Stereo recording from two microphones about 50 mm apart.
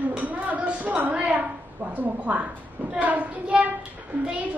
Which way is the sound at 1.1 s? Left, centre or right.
Right.